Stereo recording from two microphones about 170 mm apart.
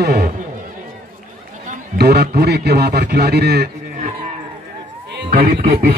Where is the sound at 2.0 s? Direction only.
70° right (ahead or behind).